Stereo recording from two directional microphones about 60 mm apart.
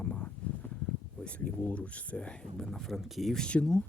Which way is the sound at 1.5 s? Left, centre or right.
Left.